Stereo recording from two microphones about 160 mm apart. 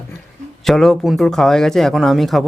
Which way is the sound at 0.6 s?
Centre (ahead or behind).